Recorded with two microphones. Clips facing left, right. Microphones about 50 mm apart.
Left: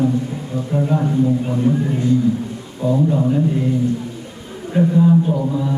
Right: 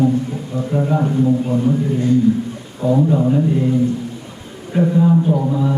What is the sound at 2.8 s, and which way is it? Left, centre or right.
Speech, centre.